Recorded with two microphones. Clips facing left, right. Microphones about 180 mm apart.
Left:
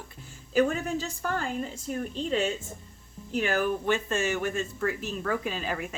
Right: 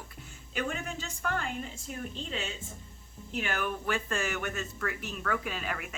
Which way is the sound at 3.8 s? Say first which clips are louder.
Left 5 dB; 20° left (ahead or behind).